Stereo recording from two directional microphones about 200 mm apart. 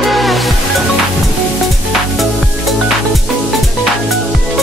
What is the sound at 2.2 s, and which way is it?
Music, centre (ahead or behind).